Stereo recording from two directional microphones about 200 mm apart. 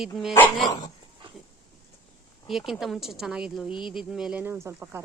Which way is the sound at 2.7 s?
Centre (ahead or behind).